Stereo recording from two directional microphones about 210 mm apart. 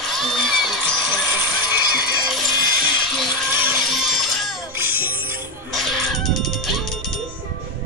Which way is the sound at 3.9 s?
Centre (ahead or behind).